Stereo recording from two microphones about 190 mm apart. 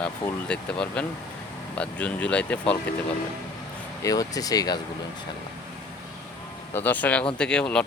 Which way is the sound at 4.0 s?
20° left (ahead or behind).